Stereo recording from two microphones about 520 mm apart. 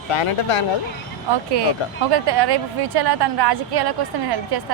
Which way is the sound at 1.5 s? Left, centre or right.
Right.